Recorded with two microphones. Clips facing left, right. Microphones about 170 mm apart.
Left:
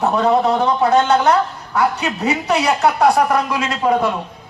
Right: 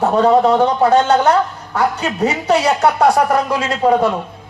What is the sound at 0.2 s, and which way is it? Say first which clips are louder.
A man's voice: right 6 dB; 35° right (ahead or behind).